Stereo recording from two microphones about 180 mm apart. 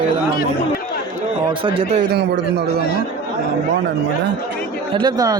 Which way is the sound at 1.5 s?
30° right (ahead or behind).